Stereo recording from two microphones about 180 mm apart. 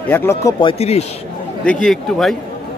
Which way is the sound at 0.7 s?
35° left (ahead or behind).